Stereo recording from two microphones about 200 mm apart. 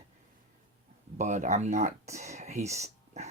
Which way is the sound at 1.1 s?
35° right (ahead or behind).